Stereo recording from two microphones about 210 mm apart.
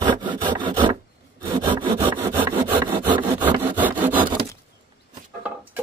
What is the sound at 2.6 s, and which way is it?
Wood, 20° right (ahead or behind).